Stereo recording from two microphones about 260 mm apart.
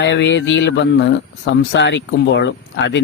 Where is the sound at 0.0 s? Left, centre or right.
Left.